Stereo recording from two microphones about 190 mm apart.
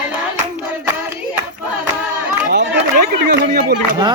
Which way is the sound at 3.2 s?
60° right (ahead or behind).